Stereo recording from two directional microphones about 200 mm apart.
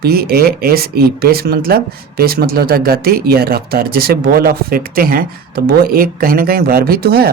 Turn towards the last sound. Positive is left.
turn(degrees=-50)  # may be behind; listen again after turning